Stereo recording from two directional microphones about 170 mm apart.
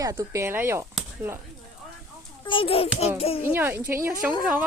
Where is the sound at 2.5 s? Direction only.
30° left (ahead or behind).